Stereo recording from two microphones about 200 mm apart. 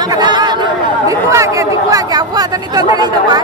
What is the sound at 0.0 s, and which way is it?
Chatter, 20° right (ahead or behind).